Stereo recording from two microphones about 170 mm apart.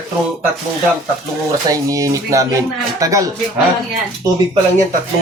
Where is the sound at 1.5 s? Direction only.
20° right (ahead or behind).